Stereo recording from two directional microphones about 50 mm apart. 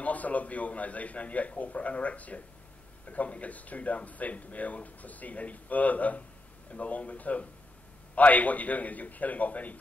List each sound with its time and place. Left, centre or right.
0.0 s a man's voice: left